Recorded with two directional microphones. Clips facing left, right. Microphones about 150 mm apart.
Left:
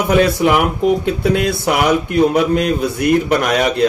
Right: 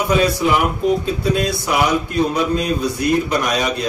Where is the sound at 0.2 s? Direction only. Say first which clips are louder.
Left 3 dB; 70° left (ahead or behind).